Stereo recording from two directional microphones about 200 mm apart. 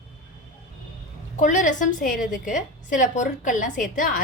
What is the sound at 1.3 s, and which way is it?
A woman's voice, 40° left (ahead or behind).